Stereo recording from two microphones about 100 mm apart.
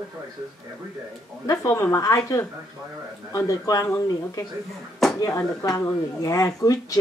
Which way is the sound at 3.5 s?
35° left (ahead or behind).